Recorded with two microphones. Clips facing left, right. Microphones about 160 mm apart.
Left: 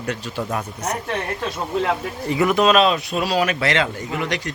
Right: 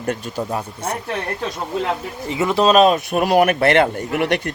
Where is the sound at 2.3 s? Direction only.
25° right (ahead or behind).